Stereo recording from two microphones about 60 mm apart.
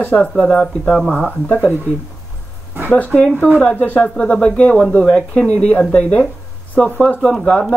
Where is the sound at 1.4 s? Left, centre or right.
Left.